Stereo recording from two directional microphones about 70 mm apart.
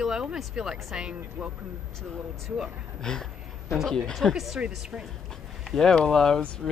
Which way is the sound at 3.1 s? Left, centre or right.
Centre.